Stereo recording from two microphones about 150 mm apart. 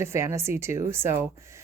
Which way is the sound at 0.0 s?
20° right (ahead or behind).